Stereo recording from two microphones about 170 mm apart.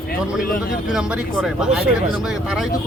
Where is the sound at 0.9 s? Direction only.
5° right (ahead or behind).